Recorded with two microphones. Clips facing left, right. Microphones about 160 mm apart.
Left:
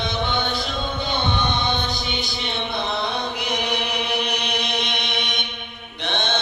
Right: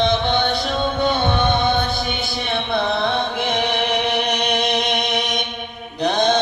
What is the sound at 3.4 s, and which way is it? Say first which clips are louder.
Music: right 5 dB; 50° right (ahead or behind).